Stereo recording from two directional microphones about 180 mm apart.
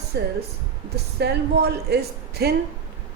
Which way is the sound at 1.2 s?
65° right (ahead or behind).